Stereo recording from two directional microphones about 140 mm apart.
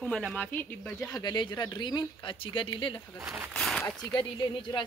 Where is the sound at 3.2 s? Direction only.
15° right (ahead or behind).